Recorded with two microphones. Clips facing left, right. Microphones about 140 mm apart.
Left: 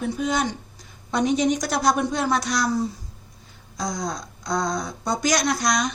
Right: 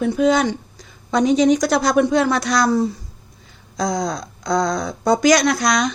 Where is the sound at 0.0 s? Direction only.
90° right.